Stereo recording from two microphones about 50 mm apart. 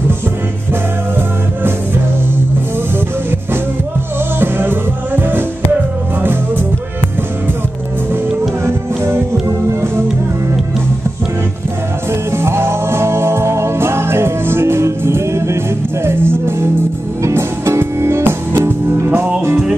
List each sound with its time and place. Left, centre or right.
4.4 s music: right
8.6 s music: right
12.3 s music: right